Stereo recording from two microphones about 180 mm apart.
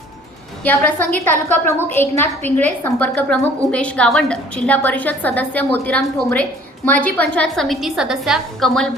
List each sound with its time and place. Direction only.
0.6 s a woman's voice: 10° left (ahead or behind)